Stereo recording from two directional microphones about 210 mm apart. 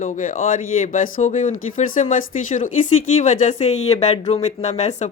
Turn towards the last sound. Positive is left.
turn(degrees=30)  # may be behind; listen again after turning